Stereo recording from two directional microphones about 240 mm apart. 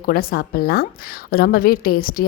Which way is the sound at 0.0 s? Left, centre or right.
Left.